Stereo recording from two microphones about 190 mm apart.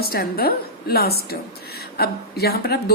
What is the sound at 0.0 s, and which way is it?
A woman's voice, 55° left (ahead or behind).